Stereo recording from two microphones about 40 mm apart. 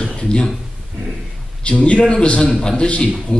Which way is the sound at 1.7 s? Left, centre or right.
Left.